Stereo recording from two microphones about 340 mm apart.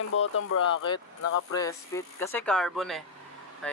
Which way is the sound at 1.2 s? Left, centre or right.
Left.